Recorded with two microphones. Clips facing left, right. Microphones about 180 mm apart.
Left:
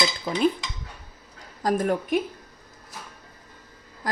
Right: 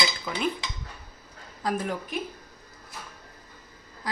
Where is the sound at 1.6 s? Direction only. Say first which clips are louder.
Left 6 dB; 45° left (ahead or behind).